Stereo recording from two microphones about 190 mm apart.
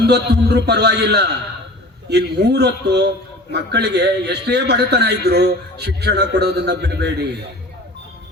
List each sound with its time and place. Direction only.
0.0 s a man's voice: 60° right (ahead or behind)